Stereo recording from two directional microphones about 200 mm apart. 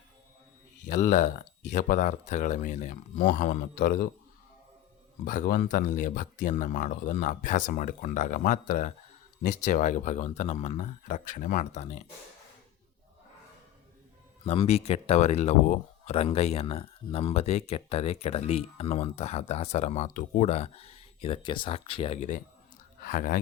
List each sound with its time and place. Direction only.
0.9 s speech: 40° left (ahead or behind)
5.2 s speech: 45° left (ahead or behind)
14.4 s speech: 30° left (ahead or behind)